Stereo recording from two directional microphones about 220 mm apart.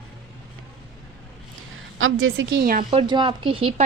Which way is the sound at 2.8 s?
20° right (ahead or behind).